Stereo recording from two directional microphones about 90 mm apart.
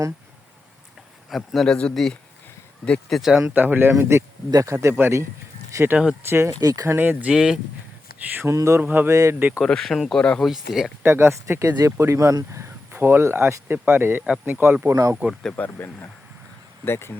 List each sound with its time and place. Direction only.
1.3 s a man's voice: 5° left (ahead or behind)
3.5 s speech: 20° right (ahead or behind)
6.6 s speech: 45° right (ahead or behind)
6.8 s speech: 25° right (ahead or behind)
7.3 s speech: 10° right (ahead or behind)
8.4 s speech: 35° right (ahead or behind)
8.8 s speech: 20° right (ahead or behind)
9.0 s speech: 35° right (ahead or behind)
9.6 s speech: 5° left (ahead or behind)
10.5 s a man's voice: 5° right (ahead or behind)
11.0 s speech: 25° right (ahead or behind)
15.5 s speech: 20° left (ahead or behind)